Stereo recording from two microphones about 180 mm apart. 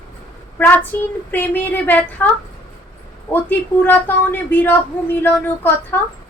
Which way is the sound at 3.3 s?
10° left (ahead or behind).